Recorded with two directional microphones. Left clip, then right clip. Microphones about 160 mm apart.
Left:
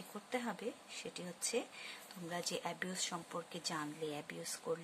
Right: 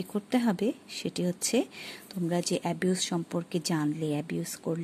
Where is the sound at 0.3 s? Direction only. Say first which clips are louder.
Right 12 dB; 60° right (ahead or behind).